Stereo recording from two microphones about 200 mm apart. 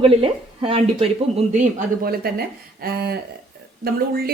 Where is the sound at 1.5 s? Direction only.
40° right (ahead or behind).